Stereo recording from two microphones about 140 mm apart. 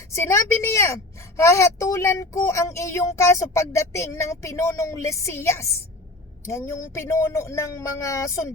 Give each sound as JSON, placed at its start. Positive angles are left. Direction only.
{"t": 0.2, "sound": "speech", "side_deg": 20}